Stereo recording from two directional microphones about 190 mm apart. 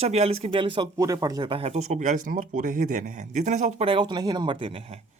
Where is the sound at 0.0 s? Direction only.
35° right (ahead or behind).